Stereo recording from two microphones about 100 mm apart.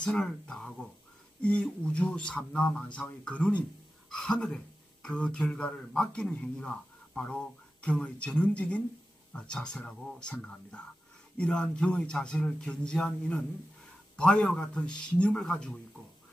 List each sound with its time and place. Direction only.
0.0 s speech: 5° left (ahead or behind)